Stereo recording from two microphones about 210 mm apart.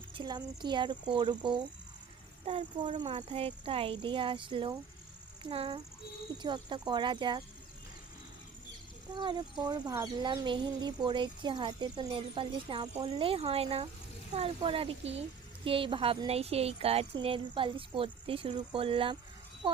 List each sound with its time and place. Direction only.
0.1 s a child's voice: 20° right (ahead or behind)
9.1 s speech: 20° right (ahead or behind)